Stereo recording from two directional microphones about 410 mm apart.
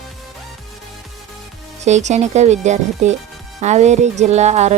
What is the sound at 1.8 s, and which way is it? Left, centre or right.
Speech, centre.